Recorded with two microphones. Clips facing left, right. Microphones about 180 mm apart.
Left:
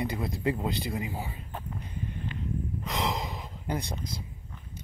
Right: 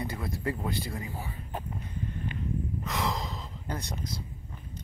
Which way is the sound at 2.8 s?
15° left (ahead or behind).